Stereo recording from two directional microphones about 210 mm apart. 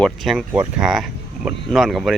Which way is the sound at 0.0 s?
Centre (ahead or behind).